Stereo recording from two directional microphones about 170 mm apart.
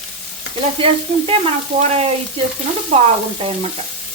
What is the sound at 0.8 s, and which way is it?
A woman's voice, 35° right (ahead or behind).